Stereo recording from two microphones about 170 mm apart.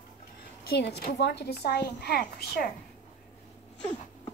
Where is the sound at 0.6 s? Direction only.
75° left (ahead or behind).